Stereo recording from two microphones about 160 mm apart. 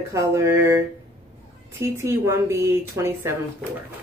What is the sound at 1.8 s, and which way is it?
Speech, 15° right (ahead or behind).